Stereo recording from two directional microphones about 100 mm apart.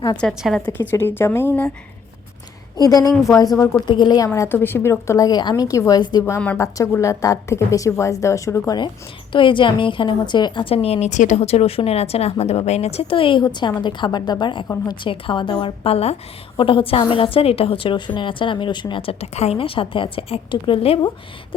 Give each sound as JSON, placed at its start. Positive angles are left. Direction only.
{"t": 0.2, "sound": "a woman's voice", "side_deg": 5}
{"t": 0.9, "sound": "speech", "side_deg": 20}
{"t": 2.7, "sound": "a woman's voice", "side_deg": 40}
{"t": 3.8, "sound": "a woman's voice", "side_deg": 50}
{"t": 4.4, "sound": "a woman's voice", "side_deg": 20}
{"t": 6.0, "sound": "a woman's voice", "side_deg": 45}
{"t": 6.6, "sound": "a woman's voice", "side_deg": 30}
{"t": 9.3, "sound": "a woman's voice", "side_deg": 55}
{"t": 16.6, "sound": "a woman's voice", "side_deg": 60}